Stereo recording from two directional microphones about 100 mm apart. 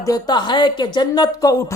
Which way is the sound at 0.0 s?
40° left (ahead or behind).